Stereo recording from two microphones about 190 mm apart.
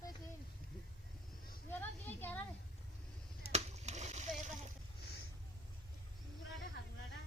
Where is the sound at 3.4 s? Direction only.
35° right (ahead or behind).